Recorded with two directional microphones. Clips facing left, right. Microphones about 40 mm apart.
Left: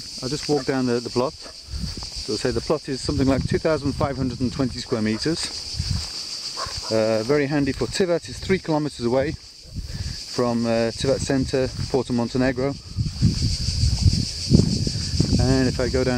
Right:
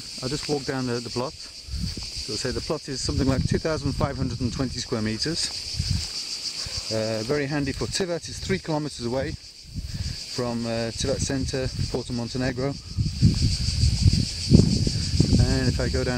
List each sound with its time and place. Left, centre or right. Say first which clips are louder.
0.2 s speech: left 2 dB; right
0.7 s speech: left 6 dB; centre
2.2 s speech: left 6 dB; left
2.5 s speech: left 6 dB; centre
3.8 s speech: left 4 dB; centre
5.1 s speech: left 5 dB; left
6.7 s speech: left 7 dB; left
10.4 s speech: left 7 dB; centre
15.4 s speech: left 5 dB; left
15.8 s speech: left 5 dB; centre